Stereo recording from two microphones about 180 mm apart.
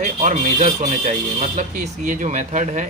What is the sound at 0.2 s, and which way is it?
Speech, 45° right (ahead or behind).